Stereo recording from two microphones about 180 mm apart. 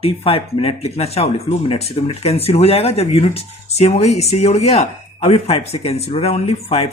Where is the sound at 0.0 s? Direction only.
35° left (ahead or behind).